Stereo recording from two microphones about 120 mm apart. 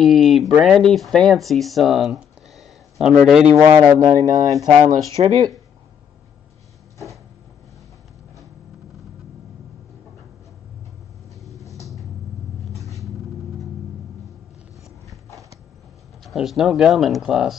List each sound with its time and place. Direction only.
0.0 s speech: centre (ahead or behind)
3.5 s speech: 30° right (ahead or behind)
5.2 s speech: 55° right (ahead or behind)
16.3 s speech: centre (ahead or behind)